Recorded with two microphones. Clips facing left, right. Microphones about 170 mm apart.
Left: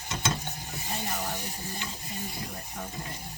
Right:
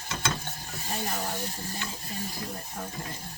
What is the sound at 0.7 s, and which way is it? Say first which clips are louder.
Stir: even; 15° left (ahead or behind).